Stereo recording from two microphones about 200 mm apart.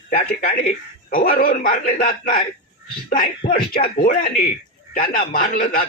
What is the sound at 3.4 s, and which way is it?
Speech, 45° left (ahead or behind).